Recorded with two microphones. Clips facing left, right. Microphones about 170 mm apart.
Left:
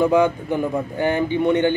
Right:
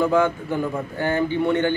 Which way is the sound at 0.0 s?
20° left (ahead or behind).